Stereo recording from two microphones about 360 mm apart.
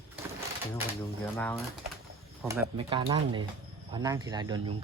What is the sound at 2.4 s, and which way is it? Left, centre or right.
Speech, centre.